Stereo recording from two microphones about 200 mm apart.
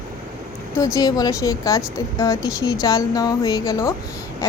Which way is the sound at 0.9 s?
20° left (ahead or behind).